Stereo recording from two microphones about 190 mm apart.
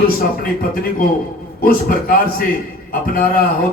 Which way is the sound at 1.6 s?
50° left (ahead or behind).